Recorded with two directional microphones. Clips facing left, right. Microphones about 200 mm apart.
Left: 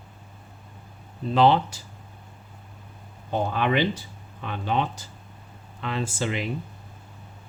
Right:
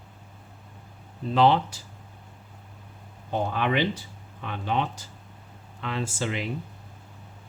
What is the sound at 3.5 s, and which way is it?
Speech, 30° left (ahead or behind).